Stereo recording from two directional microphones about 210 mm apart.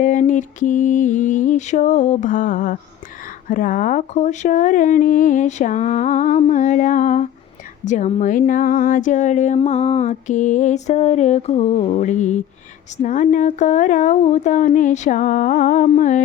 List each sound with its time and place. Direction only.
0.0 s speech: 35° left (ahead or behind)